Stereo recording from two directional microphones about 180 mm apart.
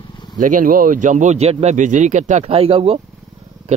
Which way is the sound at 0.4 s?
45° right (ahead or behind).